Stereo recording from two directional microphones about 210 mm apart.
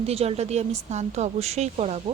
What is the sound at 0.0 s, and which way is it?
Speech, 30° right (ahead or behind).